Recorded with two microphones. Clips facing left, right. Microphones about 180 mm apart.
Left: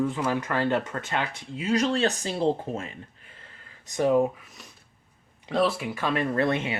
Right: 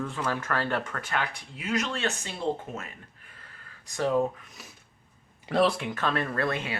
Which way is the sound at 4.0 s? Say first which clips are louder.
Left 4 dB; 15° left (ahead or behind).